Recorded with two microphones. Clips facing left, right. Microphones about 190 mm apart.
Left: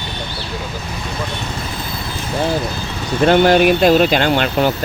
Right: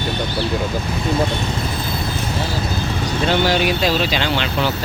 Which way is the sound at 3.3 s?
50° left (ahead or behind).